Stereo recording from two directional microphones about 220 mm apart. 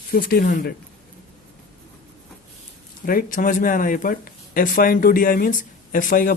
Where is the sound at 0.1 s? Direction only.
45° left (ahead or behind).